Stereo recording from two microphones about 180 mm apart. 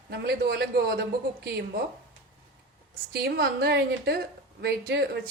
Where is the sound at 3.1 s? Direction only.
60° right (ahead or behind).